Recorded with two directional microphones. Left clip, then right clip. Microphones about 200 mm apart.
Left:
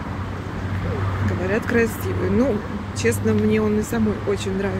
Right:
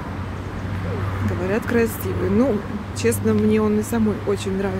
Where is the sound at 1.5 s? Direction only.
15° right (ahead or behind).